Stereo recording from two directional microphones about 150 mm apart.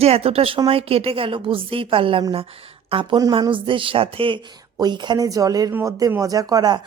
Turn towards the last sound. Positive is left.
turn(degrees=-25)  # may be behind; listen again after turning